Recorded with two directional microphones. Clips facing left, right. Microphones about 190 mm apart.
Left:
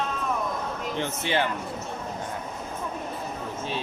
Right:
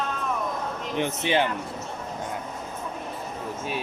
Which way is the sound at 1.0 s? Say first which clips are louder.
Right 3 dB; 15° right (ahead or behind).